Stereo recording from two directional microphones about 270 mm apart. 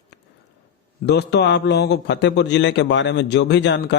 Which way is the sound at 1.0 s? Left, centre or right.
Left.